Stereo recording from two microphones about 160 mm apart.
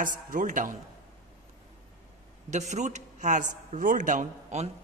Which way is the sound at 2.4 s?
45° right (ahead or behind).